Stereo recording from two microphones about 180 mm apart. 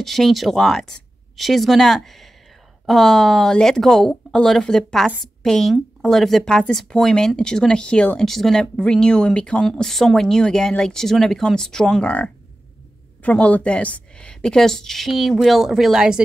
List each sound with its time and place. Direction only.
0.0 s speech: centre (ahead or behind)